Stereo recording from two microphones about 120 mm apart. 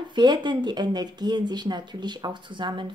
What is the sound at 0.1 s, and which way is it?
Speech, 40° right (ahead or behind).